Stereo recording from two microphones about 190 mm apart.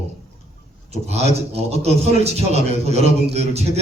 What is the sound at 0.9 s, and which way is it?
A man's voice, 35° right (ahead or behind).